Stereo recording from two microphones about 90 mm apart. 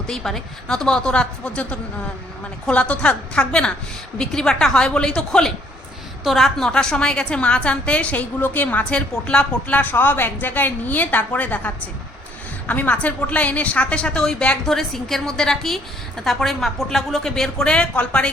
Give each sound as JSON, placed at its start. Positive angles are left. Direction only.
{"t": 0.1, "sound": "a woman's voice", "side_deg": 5}